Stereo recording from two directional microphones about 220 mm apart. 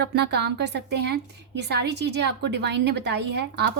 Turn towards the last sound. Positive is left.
turn(degrees=-50)  # may be behind; listen again after turning